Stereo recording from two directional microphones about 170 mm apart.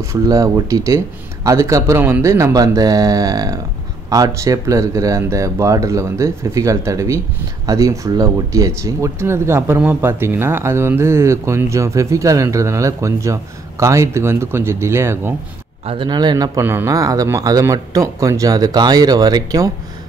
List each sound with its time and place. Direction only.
0.0 s speech: 20° right (ahead or behind)
15.8 s speech: 35° right (ahead or behind)
16.1 s speech: 25° right (ahead or behind)